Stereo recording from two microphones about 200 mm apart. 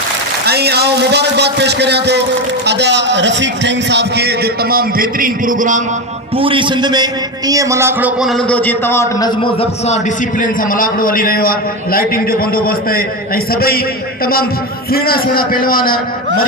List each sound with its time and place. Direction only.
0.4 s a man's voice: 55° right (ahead or behind)
6.3 s a man's voice: 25° right (ahead or behind)
8.2 s a man's voice: centre (ahead or behind); by 13.8 s 50° left (ahead or behind)
14.8 s a man's voice: 50° left (ahead or behind)